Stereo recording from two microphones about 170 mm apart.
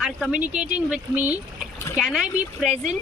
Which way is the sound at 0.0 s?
5° right (ahead or behind).